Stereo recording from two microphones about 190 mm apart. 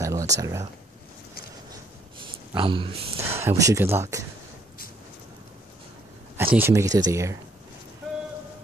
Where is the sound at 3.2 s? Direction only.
15° right (ahead or behind).